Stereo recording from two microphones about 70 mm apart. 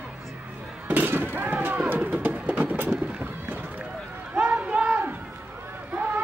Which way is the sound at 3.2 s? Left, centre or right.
Right.